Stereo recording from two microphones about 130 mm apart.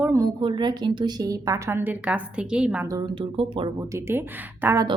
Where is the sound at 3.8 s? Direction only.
20° right (ahead or behind).